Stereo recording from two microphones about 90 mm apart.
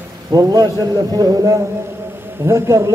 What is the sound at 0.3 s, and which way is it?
A man's voice, 45° right (ahead or behind).